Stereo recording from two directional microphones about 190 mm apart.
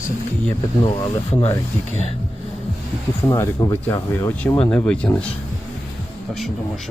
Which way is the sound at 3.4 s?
15° left (ahead or behind).